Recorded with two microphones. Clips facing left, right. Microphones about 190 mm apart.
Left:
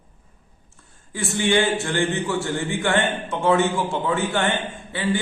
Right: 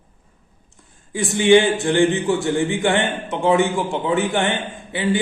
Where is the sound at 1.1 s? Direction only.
15° right (ahead or behind).